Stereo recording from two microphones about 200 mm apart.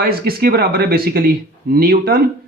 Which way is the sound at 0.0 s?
50° right (ahead or behind).